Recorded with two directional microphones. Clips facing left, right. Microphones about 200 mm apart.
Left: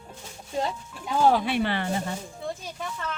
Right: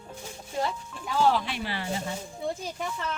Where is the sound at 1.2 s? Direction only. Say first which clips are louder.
Left 5 dB; 55° left (ahead or behind).